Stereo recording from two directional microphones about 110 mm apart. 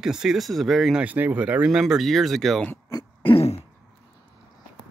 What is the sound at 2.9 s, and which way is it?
Throat clearing, 45° left (ahead or behind).